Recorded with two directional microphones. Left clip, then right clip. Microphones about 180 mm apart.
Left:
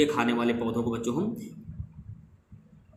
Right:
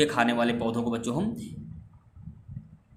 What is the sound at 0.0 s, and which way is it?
A man's voice, 50° right (ahead or behind).